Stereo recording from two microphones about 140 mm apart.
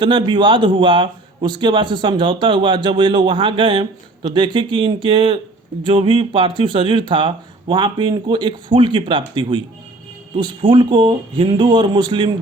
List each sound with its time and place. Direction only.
0.0 s speech: 35° right (ahead or behind)